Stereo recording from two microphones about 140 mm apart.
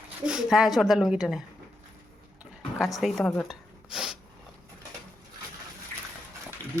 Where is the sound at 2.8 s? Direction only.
Centre (ahead or behind).